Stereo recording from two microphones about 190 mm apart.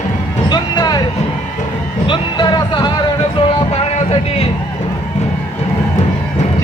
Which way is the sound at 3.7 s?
30° left (ahead or behind).